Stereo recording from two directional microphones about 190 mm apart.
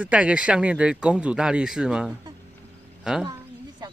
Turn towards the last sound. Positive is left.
turn(degrees=-20)  # may be behind; listen again after turning